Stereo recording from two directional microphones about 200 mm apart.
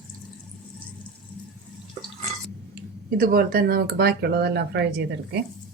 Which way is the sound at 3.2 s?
45° right (ahead or behind).